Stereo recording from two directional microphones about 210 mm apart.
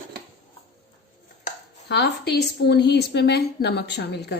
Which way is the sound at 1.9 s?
50° left (ahead or behind).